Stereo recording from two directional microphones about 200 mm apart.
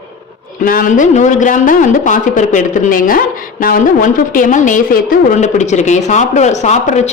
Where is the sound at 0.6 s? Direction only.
45° left (ahead or behind).